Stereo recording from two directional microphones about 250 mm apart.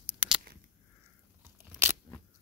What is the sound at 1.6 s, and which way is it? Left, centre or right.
Crunch, centre.